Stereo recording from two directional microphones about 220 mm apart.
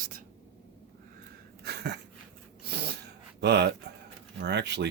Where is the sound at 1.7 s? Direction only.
50° right (ahead or behind).